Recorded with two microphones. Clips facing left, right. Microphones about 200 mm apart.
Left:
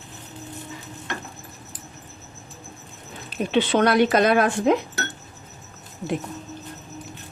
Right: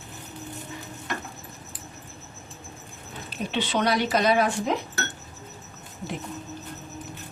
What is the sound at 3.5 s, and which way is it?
Speech, 55° left (ahead or behind).